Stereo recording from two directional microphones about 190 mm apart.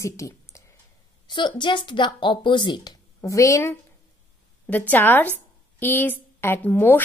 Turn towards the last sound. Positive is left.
turn(degrees=10)  # may be behind; listen again after turning